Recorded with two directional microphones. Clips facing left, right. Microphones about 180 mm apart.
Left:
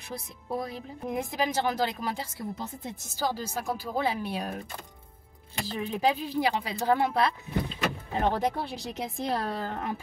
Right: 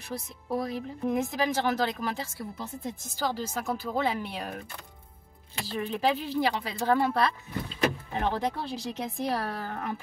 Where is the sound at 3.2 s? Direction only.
10° left (ahead or behind).